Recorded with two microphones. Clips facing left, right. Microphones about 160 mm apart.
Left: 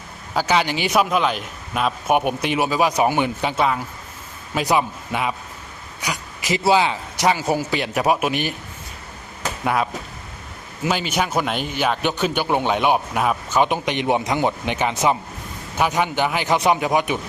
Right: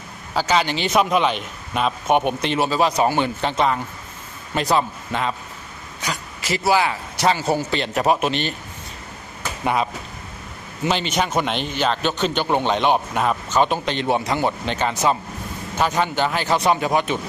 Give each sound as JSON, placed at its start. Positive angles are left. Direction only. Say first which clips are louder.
{"t": 0.3, "sound": "speech", "louder": "even", "side_deg": 10}
{"t": 6.0, "sound": "a sound", "louder": "even", "side_deg": 15}
{"t": 6.6, "sound": "speech", "louder": "left 1 dB", "side_deg": 20}
{"t": 9.6, "sound": "speech", "louder": "even", "side_deg": 0}